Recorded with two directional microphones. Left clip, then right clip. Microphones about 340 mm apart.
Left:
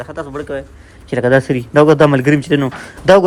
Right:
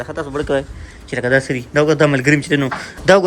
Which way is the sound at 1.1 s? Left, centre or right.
Centre.